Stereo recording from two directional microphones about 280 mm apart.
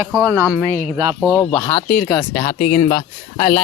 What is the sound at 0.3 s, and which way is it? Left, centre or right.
Speech, centre.